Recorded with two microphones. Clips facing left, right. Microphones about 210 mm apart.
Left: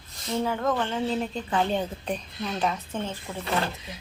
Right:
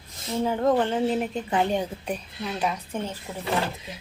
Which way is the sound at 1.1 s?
15° right (ahead or behind).